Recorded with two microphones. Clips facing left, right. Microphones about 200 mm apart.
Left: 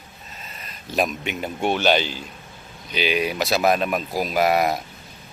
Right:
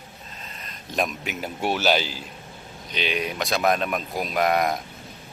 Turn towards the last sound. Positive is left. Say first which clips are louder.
# left 2 dB
turn(degrees=5)  # may be behind; listen again after turning